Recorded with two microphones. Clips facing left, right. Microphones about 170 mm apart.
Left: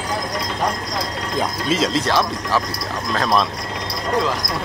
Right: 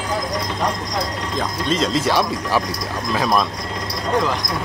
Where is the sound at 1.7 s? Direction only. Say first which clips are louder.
Even; 5° left (ahead or behind).